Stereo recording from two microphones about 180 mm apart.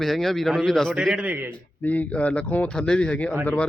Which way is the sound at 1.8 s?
10° left (ahead or behind).